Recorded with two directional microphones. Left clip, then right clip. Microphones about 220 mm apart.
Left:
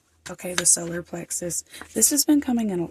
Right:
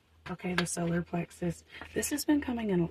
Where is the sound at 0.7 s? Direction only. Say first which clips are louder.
Left 5 dB; 50° left (ahead or behind).